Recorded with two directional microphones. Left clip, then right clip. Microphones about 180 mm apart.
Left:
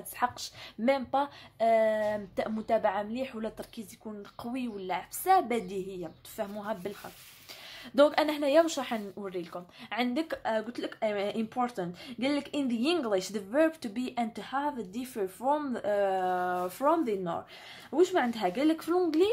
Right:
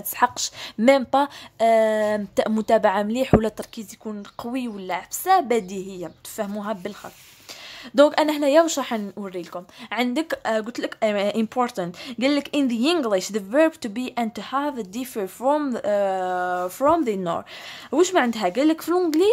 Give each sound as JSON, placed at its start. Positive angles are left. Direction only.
{"t": 0.2, "sound": "speech", "side_deg": -35}
{"t": 7.9, "sound": "speech", "side_deg": -30}